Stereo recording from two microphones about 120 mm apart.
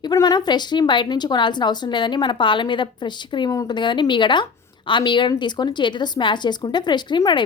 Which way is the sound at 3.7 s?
40° left (ahead or behind).